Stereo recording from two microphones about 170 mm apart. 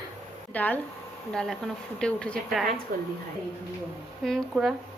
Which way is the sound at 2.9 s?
50° right (ahead or behind).